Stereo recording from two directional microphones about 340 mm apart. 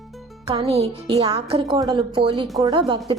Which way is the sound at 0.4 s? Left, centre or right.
Centre.